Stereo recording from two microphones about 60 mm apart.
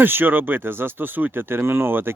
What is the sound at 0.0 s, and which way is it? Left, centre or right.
Speech, right.